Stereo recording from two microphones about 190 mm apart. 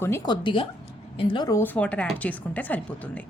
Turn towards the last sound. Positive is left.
turn(degrees=10)  # may be behind; listen again after turning